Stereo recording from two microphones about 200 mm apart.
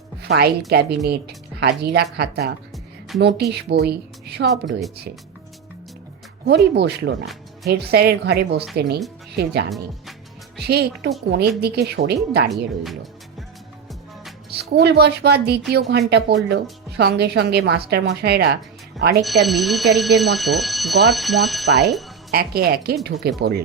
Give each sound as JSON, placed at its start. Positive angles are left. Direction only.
{"t": 0.2, "sound": "a woman's voice", "side_deg": -55}
{"t": 6.7, "sound": "a woman's voice", "side_deg": -55}
{"t": 9.6, "sound": "speech", "side_deg": 0}
{"t": 10.6, "sound": "a woman's voice", "side_deg": -55}
{"t": 14.5, "sound": "speech", "side_deg": -55}
{"t": 19.2, "sound": "speech", "side_deg": 0}
{"t": 22.3, "sound": "a woman's voice", "side_deg": -50}